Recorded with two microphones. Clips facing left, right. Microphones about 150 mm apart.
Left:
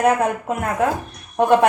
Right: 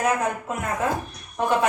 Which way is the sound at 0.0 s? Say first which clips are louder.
Left 6 dB; 55° left (ahead or behind).